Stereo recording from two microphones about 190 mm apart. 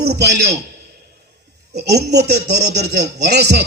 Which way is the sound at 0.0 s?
60° right (ahead or behind).